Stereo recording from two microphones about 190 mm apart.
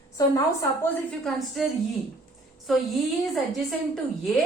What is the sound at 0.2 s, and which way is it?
Speech, 20° left (ahead or behind).